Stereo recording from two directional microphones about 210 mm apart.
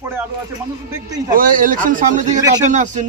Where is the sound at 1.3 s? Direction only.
40° right (ahead or behind).